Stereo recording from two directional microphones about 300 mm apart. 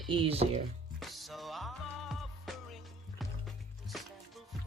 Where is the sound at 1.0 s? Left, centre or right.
Centre.